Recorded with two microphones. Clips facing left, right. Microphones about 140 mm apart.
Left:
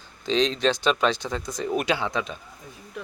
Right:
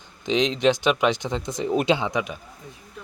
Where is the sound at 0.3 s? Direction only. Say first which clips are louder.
Right 2 dB; 20° right (ahead or behind).